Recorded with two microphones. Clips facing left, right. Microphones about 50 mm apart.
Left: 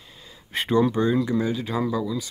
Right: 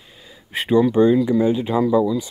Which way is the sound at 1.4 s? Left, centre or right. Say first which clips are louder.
Right 7 dB; right.